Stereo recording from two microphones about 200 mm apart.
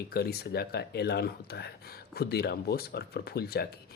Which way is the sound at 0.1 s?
50° left (ahead or behind).